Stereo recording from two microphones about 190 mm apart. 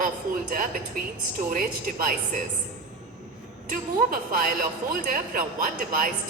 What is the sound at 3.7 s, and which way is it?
Speech, 45° right (ahead or behind).